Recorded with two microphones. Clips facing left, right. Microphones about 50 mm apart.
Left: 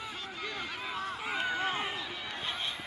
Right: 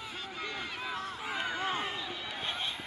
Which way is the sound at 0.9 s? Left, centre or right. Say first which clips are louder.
Left 3 dB; centre.